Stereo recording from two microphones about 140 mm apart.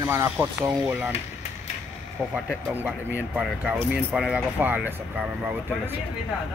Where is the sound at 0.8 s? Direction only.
15° right (ahead or behind).